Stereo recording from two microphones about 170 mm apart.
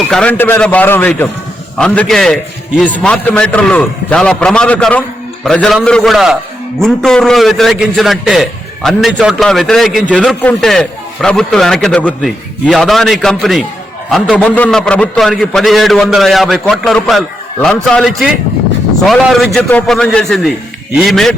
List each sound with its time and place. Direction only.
0.1 s a man's voice: 5° left (ahead or behind)